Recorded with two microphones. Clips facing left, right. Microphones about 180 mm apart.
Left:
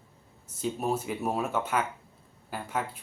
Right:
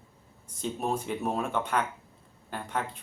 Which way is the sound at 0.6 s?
5° left (ahead or behind).